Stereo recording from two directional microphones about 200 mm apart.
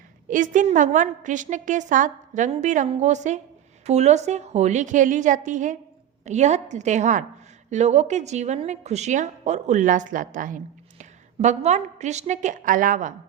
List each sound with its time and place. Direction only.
0.3 s speech: 40° right (ahead or behind)